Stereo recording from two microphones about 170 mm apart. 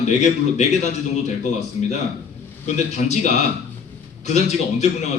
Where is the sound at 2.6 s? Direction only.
40° left (ahead or behind).